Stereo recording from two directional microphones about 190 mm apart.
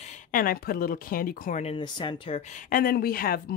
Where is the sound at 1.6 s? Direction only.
25° left (ahead or behind); by 3.5 s 50° left (ahead or behind).